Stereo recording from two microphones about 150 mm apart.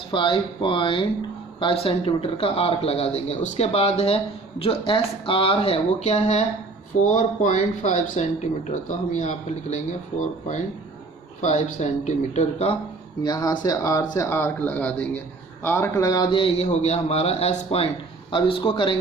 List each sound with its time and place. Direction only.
0.1 s speech: 35° left (ahead or behind)
7.0 s a man's voice: 60° left (ahead or behind)
11.3 s a man's voice: 50° left (ahead or behind)
13.2 s speech: 25° left (ahead or behind)